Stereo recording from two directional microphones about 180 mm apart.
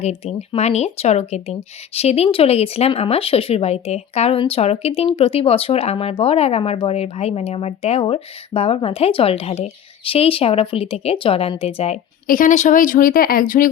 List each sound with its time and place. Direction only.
0.0 s speech: 35° left (ahead or behind)
12.3 s speech: 45° left (ahead or behind)